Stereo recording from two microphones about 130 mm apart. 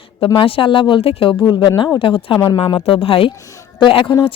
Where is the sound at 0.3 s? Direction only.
45° left (ahead or behind).